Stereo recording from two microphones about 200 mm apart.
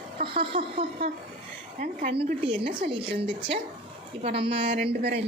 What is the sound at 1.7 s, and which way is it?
A woman's voice, 40° right (ahead or behind).